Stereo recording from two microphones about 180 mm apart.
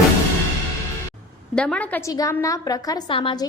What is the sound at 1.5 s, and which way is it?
A woman's voice, 5° left (ahead or behind).